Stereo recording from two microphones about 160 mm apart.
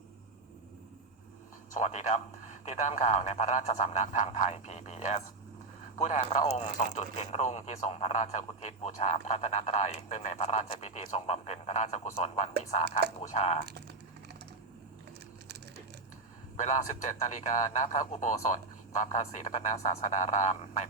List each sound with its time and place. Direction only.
1.7 s speech: 50° left (ahead or behind)
13.7 s speech: 90° right
16.6 s speech: 50° left (ahead or behind)